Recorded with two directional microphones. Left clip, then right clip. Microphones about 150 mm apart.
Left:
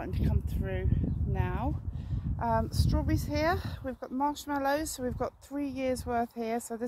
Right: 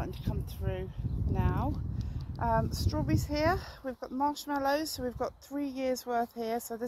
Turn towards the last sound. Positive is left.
turn(degrees=10)  # may be behind; listen again after turning